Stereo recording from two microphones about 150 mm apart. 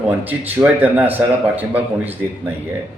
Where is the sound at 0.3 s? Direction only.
10° right (ahead or behind).